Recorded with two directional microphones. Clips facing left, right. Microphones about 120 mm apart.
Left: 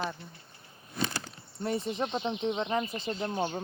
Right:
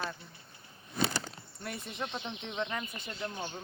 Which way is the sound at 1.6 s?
30° left (ahead or behind).